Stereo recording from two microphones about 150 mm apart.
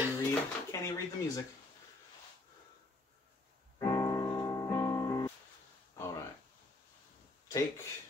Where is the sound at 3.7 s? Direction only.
25° left (ahead or behind).